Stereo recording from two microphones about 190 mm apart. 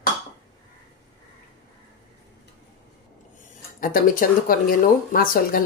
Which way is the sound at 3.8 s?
45° left (ahead or behind).